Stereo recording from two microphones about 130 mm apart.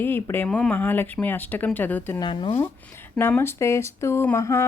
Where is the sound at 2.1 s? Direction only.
35° left (ahead or behind).